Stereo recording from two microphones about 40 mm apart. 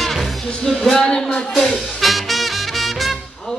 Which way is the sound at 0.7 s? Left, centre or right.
Centre.